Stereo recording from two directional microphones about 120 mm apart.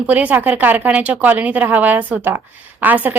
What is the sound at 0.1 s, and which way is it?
A woman's voice, 15° right (ahead or behind).